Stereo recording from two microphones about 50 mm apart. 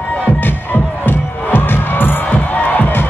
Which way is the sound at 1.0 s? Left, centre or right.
Left.